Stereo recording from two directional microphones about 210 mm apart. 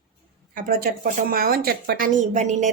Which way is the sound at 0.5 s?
40° right (ahead or behind).